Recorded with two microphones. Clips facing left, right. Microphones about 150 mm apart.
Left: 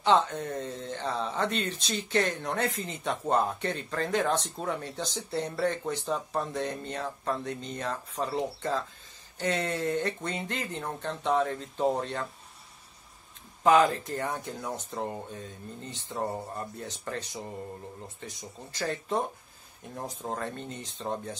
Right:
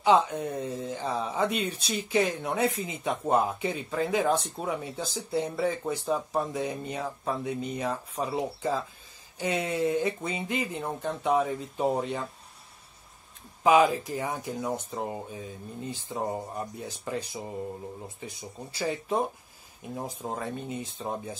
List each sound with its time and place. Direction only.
0.0 s speech: 10° right (ahead or behind)
13.7 s speech: 10° right (ahead or behind)